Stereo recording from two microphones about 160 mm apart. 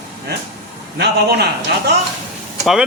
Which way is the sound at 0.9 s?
90° right.